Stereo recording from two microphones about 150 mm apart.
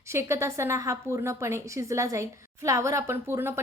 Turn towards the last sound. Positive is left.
turn(degrees=-15)  # may be behind; listen again after turning